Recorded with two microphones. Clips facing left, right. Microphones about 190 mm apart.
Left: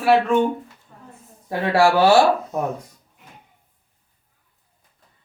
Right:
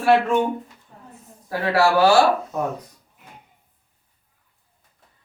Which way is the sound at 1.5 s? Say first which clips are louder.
Left 2 dB; 25° left (ahead or behind).